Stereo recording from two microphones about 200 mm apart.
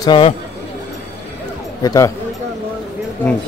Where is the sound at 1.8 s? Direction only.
20° left (ahead or behind).